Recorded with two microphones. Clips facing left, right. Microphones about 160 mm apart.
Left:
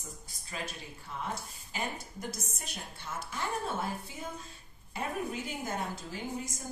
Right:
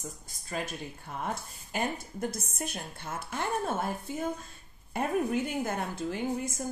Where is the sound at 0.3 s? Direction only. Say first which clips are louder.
Right 5 dB; 50° right (ahead or behind).